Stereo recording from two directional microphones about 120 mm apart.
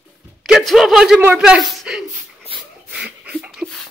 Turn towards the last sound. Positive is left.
turn(degrees=5)  # may be behind; listen again after turning